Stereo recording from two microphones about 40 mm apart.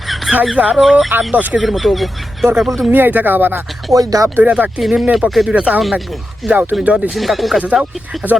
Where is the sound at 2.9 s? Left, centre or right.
Right.